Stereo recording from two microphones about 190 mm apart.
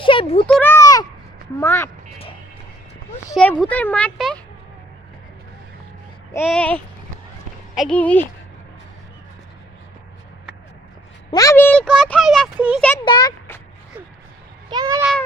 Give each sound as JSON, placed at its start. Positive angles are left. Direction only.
{"t": 0.0, "sound": "a sound", "side_deg": 25}
{"t": 0.4, "sound": "speech", "side_deg": 10}
{"t": 3.3, "sound": "speech", "side_deg": 5}
{"t": 6.3, "sound": "speech", "side_deg": 10}
{"t": 11.3, "sound": "speech", "side_deg": 20}
{"t": 13.1, "sound": "a child's voice", "side_deg": 20}
{"t": 14.7, "sound": "speech", "side_deg": -20}